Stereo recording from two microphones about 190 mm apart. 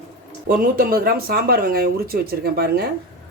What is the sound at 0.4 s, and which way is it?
Speech, 50° right (ahead or behind).